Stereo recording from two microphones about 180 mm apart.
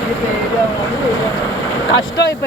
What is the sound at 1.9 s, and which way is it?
Vehicle, 70° left (ahead or behind).